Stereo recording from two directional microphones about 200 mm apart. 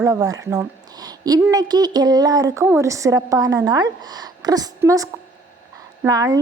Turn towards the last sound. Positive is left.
turn(degrees=-15)  # may be behind; listen again after turning